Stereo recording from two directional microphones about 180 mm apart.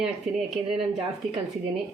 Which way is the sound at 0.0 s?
Centre (ahead or behind).